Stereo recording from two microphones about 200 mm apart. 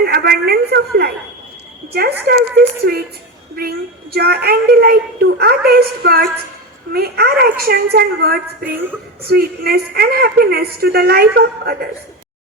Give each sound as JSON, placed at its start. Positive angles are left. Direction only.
{"t": 0.0, "sound": "a sound", "side_deg": -50}
{"t": 1.9, "sound": "a woman's voice", "side_deg": -55}
{"t": 8.6, "sound": "a woman's voice", "side_deg": -10}
{"t": 9.2, "sound": "a woman's voice", "side_deg": -50}